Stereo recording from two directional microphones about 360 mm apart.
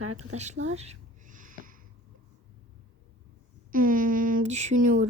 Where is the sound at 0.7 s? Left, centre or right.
Centre.